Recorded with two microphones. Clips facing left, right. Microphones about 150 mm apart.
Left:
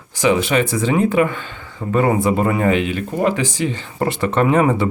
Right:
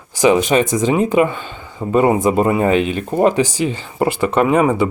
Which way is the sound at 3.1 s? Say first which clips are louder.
Right 5 dB; 35° right (ahead or behind).